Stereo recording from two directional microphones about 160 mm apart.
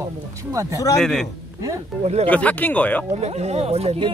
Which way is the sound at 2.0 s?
40° right (ahead or behind).